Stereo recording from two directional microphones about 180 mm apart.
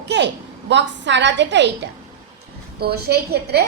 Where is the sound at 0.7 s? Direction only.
80° right.